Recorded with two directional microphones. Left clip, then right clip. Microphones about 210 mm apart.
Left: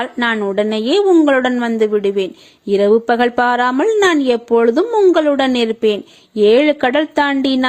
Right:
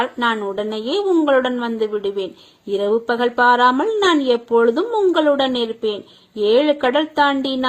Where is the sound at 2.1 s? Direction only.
80° left.